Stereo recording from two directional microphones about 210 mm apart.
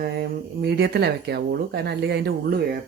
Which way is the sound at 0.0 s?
50° right (ahead or behind).